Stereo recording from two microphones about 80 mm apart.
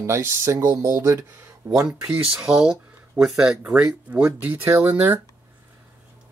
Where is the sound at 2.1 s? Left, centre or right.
Centre.